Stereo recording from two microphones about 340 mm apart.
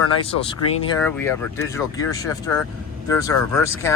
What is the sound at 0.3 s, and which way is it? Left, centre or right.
Speech, centre.